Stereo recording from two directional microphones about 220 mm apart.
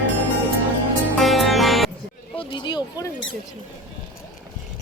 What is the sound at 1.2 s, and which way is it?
Music, centre (ahead or behind).